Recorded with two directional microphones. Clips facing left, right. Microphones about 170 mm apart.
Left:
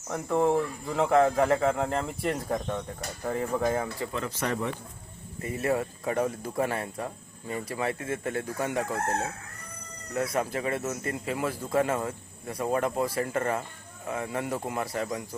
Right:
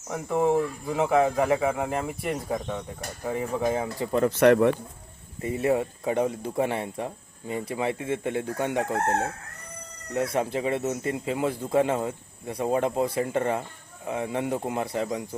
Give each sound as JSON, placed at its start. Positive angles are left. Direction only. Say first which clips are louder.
{"t": 0.1, "sound": "speech", "louder": "right 1 dB", "side_deg": -10}
{"t": 4.3, "sound": "speech", "louder": "right 16 dB", "side_deg": -65}
{"t": 5.4, "sound": "speech", "louder": "right 4 dB", "side_deg": -25}
{"t": 10.2, "sound": "speech", "louder": "right 3 dB", "side_deg": -25}